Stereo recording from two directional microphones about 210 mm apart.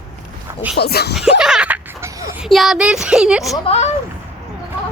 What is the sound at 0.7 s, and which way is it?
Speech, 50° left (ahead or behind).